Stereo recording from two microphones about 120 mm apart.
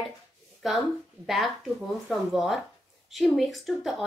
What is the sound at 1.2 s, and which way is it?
Speech, centre (ahead or behind).